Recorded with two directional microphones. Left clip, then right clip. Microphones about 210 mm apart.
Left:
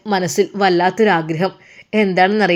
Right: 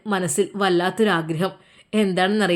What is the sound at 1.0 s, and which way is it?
Speech, 5° right (ahead or behind).